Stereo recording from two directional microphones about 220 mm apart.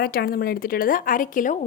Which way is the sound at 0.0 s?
40° left (ahead or behind).